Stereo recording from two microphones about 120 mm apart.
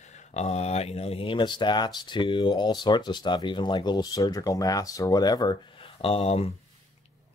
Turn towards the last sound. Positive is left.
turn(degrees=60)  # may be behind; listen again after turning